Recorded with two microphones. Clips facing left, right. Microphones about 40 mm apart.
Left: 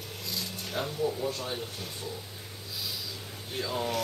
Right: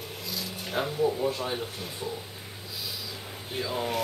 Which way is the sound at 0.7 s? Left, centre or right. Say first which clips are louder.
Right 4 dB; centre.